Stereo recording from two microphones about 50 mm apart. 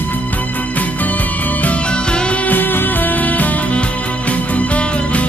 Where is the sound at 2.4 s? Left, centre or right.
Left.